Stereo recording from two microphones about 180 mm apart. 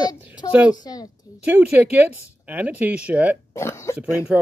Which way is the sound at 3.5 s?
15° left (ahead or behind).